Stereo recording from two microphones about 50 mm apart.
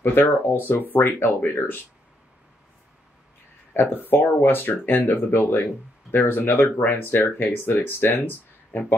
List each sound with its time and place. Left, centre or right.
0.0 s speech: left
3.7 s speech: left